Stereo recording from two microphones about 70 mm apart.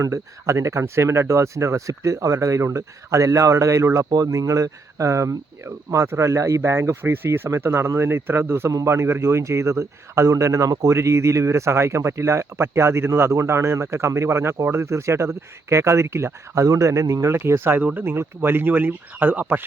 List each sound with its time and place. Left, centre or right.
0.0 s speech: right
10.9 s speech: right
17.7 s speech: right